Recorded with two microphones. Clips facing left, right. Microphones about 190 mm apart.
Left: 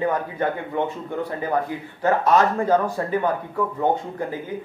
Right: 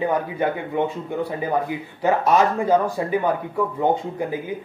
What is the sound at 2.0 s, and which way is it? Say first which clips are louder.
Speech: even; 15° right (ahead or behind).